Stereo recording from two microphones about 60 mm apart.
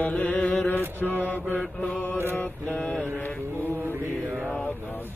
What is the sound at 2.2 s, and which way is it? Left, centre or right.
Mantra, left.